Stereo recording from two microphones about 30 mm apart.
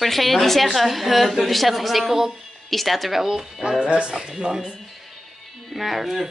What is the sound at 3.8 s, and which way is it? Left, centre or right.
Speech, right.